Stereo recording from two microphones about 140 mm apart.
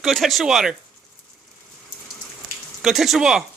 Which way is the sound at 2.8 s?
Centre (ahead or behind).